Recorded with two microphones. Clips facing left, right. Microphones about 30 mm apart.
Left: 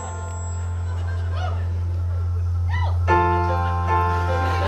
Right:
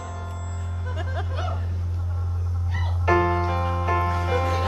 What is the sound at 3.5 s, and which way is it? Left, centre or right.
Music, centre.